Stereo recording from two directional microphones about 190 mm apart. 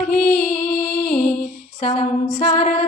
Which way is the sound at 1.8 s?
35° left (ahead or behind).